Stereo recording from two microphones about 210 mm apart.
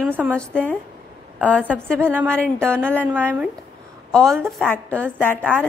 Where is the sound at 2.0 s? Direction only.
10° right (ahead or behind).